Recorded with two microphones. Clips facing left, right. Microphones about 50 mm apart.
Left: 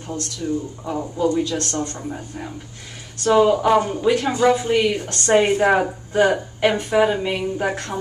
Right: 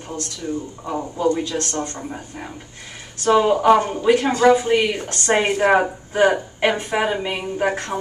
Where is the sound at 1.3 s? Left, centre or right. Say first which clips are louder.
Left 1 dB; right.